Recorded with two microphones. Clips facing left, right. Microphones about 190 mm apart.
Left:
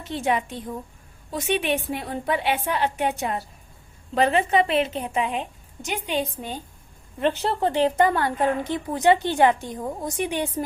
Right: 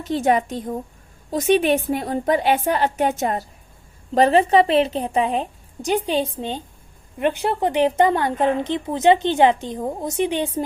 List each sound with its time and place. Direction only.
0.0 s a woman's voice: 40° right (ahead or behind)
7.2 s a woman's voice: 15° right (ahead or behind)